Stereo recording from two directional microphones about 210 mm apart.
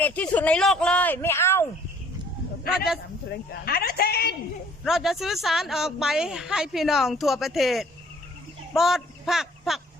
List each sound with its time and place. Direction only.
0.0 s speech: 5° left (ahead or behind)
2.7 s a woman's voice: 5° right (ahead or behind)
3.7 s a woman's voice: 45° left (ahead or behind)
4.8 s a woman's voice: centre (ahead or behind)